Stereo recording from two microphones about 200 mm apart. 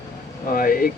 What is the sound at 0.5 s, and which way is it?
Speech, 45° left (ahead or behind).